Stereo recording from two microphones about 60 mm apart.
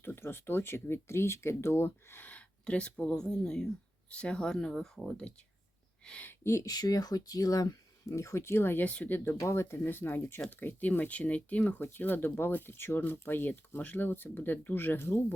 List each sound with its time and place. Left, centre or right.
0.0 s speech: left
2.3 s a sound: centre
3.2 s speech: centre
6.7 s speech: left
8.8 s speech: left
9.4 s speech: left